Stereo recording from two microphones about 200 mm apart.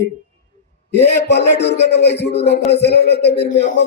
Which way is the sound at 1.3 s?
60° left (ahead or behind).